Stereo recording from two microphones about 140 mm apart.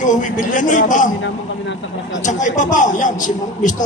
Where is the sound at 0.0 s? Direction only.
65° left (ahead or behind).